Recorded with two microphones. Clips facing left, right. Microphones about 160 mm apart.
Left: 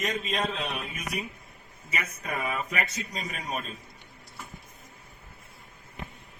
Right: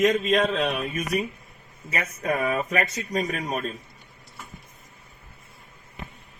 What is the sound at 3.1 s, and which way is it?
Speech, 50° right (ahead or behind).